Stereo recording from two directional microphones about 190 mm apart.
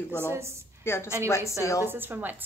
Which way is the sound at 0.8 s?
15° left (ahead or behind).